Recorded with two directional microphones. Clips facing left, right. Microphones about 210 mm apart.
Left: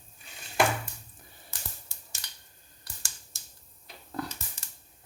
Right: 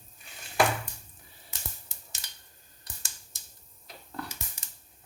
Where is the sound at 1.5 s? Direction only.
25° right (ahead or behind).